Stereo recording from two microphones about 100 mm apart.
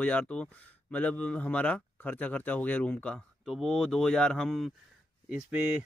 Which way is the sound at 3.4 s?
Centre (ahead or behind).